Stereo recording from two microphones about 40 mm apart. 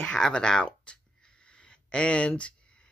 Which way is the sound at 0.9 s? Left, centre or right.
Left.